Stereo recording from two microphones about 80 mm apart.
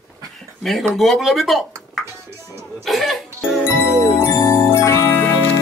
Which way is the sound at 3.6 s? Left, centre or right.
Left.